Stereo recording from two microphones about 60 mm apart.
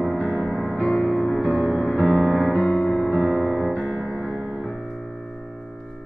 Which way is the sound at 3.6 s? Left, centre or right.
Centre.